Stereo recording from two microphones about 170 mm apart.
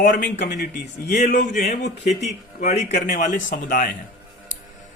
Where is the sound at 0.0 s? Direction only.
55° left (ahead or behind).